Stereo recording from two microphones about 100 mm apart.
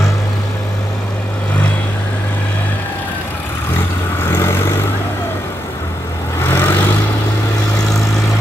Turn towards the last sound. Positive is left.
turn(degrees=25)  # may be behind; listen again after turning